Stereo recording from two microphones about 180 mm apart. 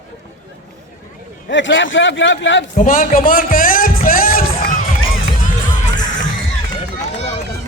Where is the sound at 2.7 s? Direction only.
50° left (ahead or behind).